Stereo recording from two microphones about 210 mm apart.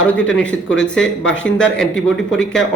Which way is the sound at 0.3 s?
5° left (ahead or behind).